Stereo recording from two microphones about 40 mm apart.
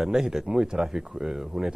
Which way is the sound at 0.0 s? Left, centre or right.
Centre.